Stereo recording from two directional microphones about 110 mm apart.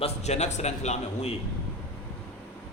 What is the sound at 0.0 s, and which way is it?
A man's voice, 85° left.